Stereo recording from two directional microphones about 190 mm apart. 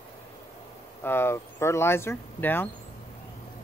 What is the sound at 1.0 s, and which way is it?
Speech, 10° left (ahead or behind).